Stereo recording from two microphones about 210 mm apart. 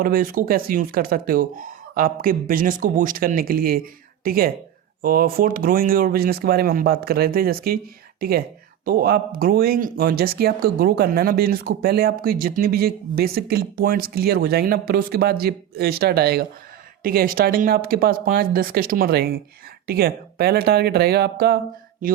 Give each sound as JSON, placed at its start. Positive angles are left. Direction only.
{"t": 0.0, "sound": "speech", "side_deg": -40}